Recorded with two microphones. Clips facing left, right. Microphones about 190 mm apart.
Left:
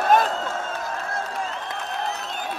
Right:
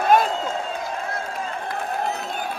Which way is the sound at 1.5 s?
50° right (ahead or behind).